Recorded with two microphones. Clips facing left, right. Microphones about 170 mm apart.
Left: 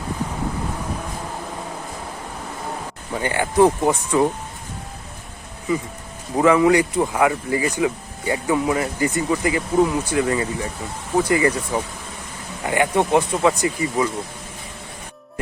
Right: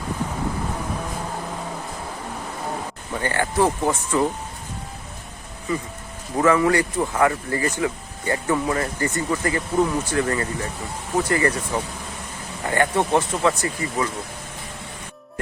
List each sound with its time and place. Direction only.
3.2 s speech: 15° left (ahead or behind)
6.3 s speech: 15° left (ahead or behind)